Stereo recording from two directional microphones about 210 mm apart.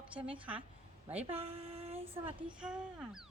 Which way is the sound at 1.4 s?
25° right (ahead or behind).